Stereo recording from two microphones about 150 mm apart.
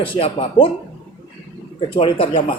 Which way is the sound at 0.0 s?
35° left (ahead or behind).